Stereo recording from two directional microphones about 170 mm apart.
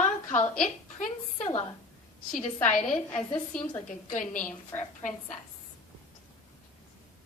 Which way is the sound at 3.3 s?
5° left (ahead or behind).